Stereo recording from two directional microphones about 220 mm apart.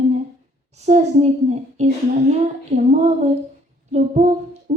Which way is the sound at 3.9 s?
30° right (ahead or behind).